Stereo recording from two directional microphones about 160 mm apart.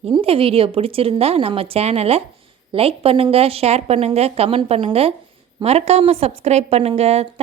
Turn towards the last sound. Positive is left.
turn(degrees=-40)  # may be behind; listen again after turning